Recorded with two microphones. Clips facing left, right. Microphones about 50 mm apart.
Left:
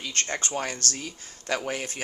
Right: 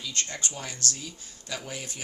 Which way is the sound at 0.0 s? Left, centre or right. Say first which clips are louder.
Left 4 dB; left.